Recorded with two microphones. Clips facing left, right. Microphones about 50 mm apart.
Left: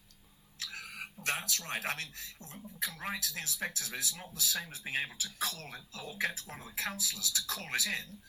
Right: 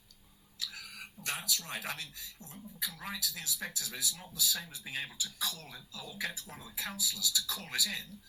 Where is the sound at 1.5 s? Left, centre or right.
Left.